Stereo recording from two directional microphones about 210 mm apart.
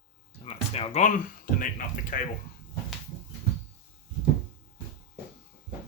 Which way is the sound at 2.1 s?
40° left (ahead or behind).